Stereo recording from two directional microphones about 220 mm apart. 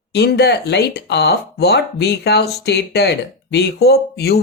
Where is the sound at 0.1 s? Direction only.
50° left (ahead or behind).